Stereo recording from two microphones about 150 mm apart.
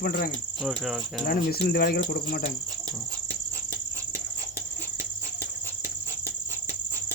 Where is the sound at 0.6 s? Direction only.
5° right (ahead or behind).